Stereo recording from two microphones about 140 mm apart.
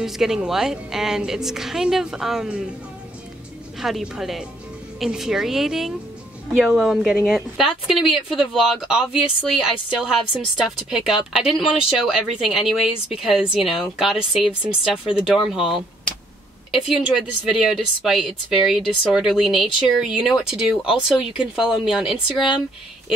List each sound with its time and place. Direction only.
0.0 s speech: 5° right (ahead or behind)
3.8 s speech: 5° right (ahead or behind)
16.9 s speech: centre (ahead or behind)